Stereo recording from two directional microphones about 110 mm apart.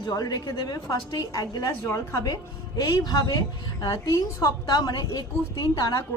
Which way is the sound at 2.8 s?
35° left (ahead or behind).